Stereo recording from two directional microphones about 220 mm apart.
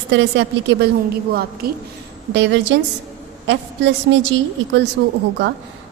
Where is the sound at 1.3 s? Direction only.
45° right (ahead or behind).